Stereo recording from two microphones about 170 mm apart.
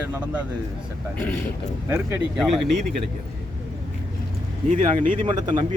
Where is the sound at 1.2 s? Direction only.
10° left (ahead or behind).